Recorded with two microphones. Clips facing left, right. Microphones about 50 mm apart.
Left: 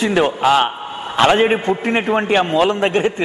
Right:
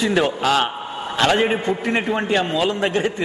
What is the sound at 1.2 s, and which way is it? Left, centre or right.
A man's voice, left.